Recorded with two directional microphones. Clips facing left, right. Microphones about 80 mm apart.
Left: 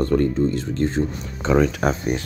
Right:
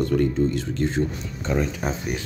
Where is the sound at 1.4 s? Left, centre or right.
Left.